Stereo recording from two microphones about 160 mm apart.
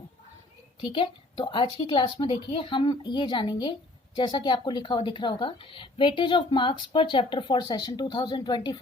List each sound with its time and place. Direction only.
0.8 s a woman's voice: 30° left (ahead or behind)